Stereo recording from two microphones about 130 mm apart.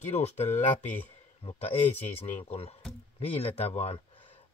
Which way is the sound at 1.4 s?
55° left (ahead or behind).